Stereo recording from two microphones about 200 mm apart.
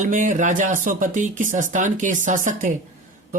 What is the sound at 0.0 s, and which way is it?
Speech, 40° right (ahead or behind).